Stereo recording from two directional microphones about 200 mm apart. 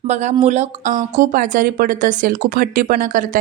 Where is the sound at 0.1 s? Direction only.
35° right (ahead or behind).